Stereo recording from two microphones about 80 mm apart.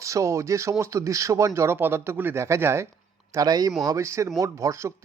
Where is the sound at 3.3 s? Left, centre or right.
Right.